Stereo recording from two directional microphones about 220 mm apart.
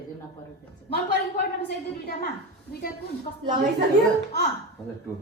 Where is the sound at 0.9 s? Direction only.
45° left (ahead or behind).